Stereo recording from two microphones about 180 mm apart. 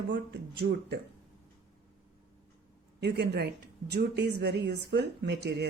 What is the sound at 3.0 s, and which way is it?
A woman's voice, 70° right (ahead or behind).